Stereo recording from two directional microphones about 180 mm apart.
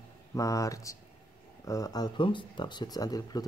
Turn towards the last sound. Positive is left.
turn(degrees=20)  # may be behind; listen again after turning